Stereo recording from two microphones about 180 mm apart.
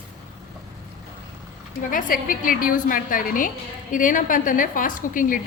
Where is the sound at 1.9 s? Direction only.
50° left (ahead or behind).